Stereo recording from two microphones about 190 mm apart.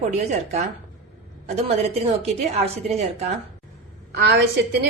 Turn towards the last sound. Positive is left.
turn(degrees=-60)  # may be behind; listen again after turning